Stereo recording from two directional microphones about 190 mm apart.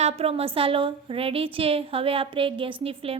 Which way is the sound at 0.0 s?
35° right (ahead or behind).